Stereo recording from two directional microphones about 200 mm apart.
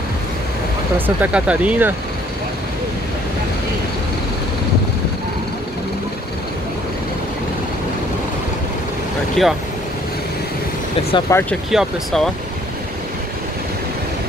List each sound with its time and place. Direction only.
0.9 s speech: 10° right (ahead or behind)
9.4 s speech: centre (ahead or behind)
11.3 s speech: 15° left (ahead or behind)
11.7 s speech: centre (ahead or behind)